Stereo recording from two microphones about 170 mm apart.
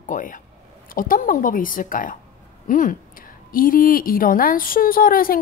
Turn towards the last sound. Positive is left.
turn(degrees=55)  # may be behind; listen again after turning